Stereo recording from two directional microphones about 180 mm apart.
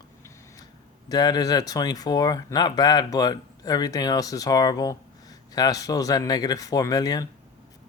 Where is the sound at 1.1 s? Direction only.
20° left (ahead or behind).